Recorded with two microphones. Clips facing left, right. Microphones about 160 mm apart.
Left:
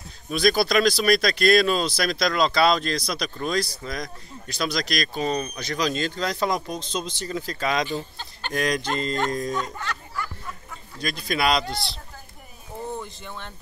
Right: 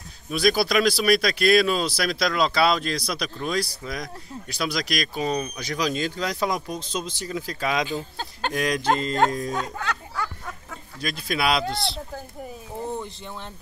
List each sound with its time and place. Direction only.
0.3 s speech: 5° right (ahead or behind)
10.1 s a sound: 85° right
11.0 s speech: 5° right (ahead or behind)